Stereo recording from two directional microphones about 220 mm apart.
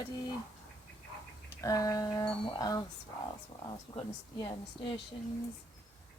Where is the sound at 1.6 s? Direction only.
15° left (ahead or behind).